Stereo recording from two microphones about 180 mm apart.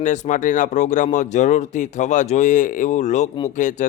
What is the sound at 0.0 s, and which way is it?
Speech, 45° left (ahead or behind).